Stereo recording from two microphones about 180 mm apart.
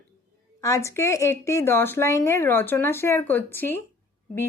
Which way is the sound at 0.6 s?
15° left (ahead or behind).